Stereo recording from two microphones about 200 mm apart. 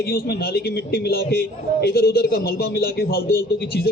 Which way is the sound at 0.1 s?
50° left (ahead or behind).